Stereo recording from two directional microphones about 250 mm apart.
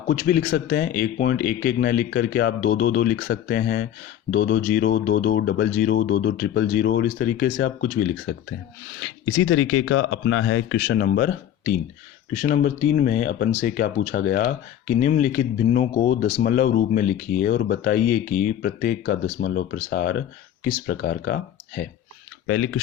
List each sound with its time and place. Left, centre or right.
0.1 s speech: left
9.0 s speech: left
22.4 s speech: left